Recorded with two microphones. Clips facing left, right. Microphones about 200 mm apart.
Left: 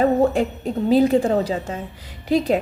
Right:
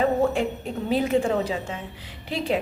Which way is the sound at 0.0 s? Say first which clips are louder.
Left 4 dB; 40° left (ahead or behind).